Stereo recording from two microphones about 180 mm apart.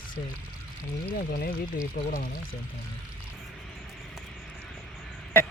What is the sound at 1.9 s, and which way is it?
Speech, 50° left (ahead or behind).